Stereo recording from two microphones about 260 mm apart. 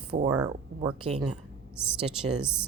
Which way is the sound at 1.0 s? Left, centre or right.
Right.